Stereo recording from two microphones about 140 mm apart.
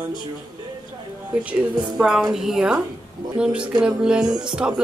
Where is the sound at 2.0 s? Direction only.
5° right (ahead or behind).